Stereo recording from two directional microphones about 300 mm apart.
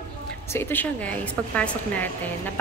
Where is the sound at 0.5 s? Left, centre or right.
Centre.